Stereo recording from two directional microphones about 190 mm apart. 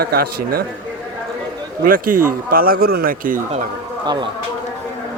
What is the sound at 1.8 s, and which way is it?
Speech, 45° right (ahead or behind).